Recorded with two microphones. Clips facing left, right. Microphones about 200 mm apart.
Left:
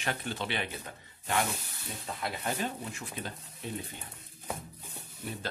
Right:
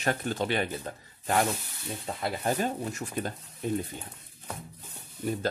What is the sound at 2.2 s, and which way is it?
Speech, 35° right (ahead or behind).